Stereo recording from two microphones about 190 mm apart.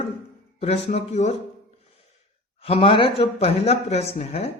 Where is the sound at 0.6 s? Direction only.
35° left (ahead or behind).